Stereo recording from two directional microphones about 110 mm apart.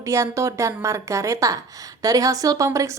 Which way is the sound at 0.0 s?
25° right (ahead or behind).